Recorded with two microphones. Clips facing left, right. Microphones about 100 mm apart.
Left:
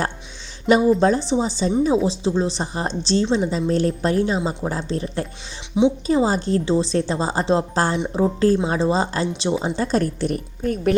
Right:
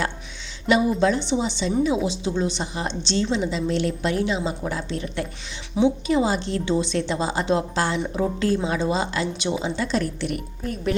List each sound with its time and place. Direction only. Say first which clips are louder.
0.9 s a woman's voice: left 3 dB; 40° left (ahead or behind)
5.7 s speech: left 2 dB; 20° left (ahead or behind)
6.1 s a woman's voice: left 3 dB; 35° left (ahead or behind)